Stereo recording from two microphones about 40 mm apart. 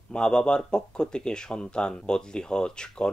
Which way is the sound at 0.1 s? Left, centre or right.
Left.